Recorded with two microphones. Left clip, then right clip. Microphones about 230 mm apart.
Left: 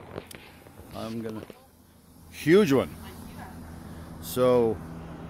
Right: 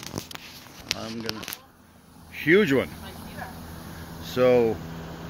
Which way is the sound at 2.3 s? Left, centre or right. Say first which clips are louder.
Right 1 dB; left.